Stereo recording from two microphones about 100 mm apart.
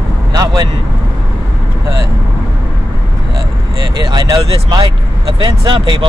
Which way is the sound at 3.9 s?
45° right (ahead or behind).